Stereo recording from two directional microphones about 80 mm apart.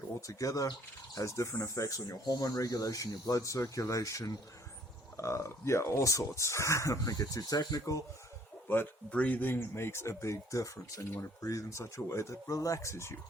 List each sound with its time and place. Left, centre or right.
0.3 s speech: left
8.6 s speech: left
11.8 s speech: left